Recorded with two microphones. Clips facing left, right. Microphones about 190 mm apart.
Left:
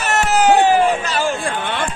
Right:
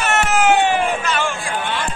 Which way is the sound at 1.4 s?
55° left (ahead or behind).